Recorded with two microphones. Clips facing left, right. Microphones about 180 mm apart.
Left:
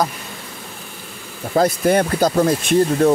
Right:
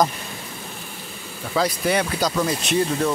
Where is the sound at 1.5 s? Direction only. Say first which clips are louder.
Left 6 dB; 50° left (ahead or behind).